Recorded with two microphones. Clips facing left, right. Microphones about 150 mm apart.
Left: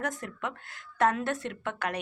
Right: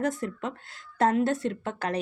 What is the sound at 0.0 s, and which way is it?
A woman's voice, 30° right (ahead or behind).